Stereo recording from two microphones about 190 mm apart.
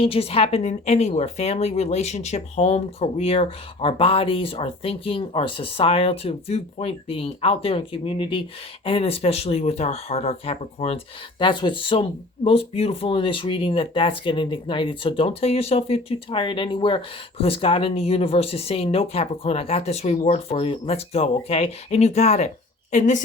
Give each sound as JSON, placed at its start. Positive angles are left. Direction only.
{"t": 0.0, "sound": "speech", "side_deg": 30}